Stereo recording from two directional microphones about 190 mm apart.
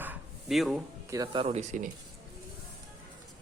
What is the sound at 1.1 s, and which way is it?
Speech, 25° right (ahead or behind).